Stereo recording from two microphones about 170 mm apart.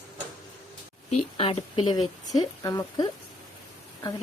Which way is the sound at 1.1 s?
35° left (ahead or behind).